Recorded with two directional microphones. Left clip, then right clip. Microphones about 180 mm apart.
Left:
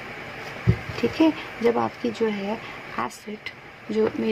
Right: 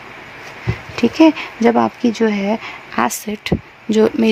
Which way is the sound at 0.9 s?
55° right (ahead or behind).